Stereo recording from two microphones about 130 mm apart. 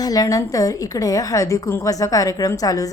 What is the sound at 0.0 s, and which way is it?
A woman's voice, 30° left (ahead or behind).